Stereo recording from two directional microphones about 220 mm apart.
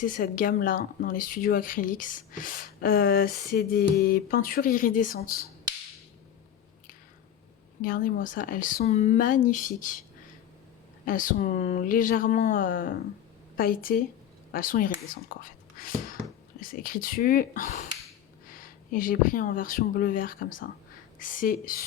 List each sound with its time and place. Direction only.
0.0 s speech: 40° left (ahead or behind)
7.8 s speech: 40° left (ahead or behind)
11.0 s speech: 35° left (ahead or behind)